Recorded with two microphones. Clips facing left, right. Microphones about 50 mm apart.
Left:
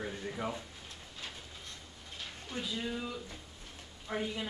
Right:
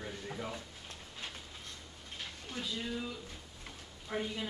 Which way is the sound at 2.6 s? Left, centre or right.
Centre.